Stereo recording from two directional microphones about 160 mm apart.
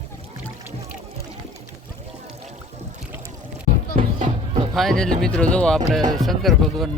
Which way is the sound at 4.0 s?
45° right (ahead or behind).